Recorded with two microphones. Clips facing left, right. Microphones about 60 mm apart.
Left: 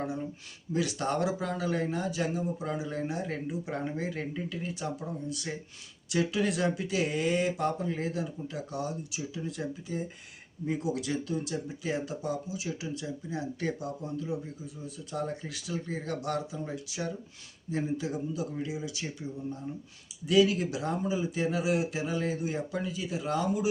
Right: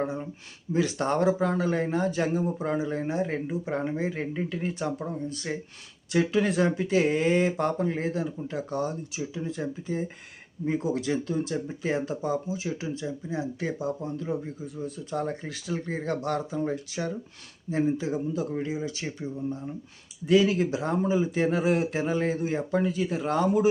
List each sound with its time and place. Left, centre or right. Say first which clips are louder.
0.0 s a sound: right 4 dB; right
0.7 s speech: right 4 dB; right
9.4 s speech: right 3 dB; right